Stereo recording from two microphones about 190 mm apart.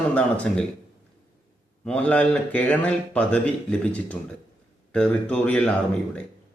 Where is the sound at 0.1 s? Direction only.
5° left (ahead or behind).